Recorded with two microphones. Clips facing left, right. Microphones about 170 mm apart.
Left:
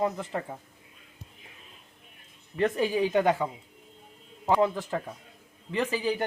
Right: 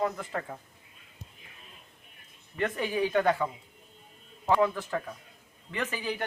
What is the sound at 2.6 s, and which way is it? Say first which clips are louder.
Speech: left 5 dB; 30° left (ahead or behind).